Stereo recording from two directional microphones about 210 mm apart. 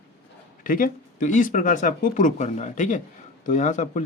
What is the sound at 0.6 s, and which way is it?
Speech, 40° left (ahead or behind).